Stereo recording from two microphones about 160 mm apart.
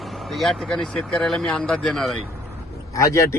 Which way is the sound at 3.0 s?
20° left (ahead or behind).